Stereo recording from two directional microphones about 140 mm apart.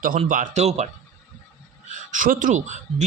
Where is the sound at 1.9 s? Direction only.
70° right (ahead or behind).